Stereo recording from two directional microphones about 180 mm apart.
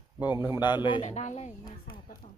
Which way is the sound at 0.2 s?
10° right (ahead or behind).